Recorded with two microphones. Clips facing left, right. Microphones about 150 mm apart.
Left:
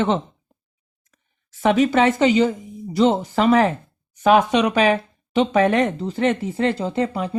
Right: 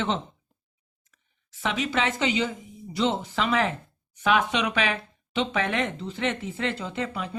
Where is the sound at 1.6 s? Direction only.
50° left (ahead or behind).